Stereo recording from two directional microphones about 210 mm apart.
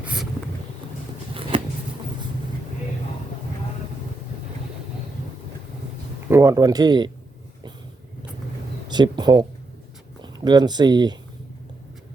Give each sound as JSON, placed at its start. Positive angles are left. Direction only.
{"t": 1.3, "sound": "shuffling cards", "side_deg": -25}
{"t": 6.2, "sound": "speech", "side_deg": -15}
{"t": 8.9, "sound": "speech", "side_deg": -20}